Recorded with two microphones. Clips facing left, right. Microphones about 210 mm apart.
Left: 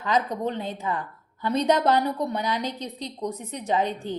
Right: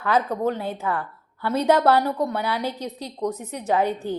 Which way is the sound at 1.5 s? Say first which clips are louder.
Right 3 dB; 10° right (ahead or behind).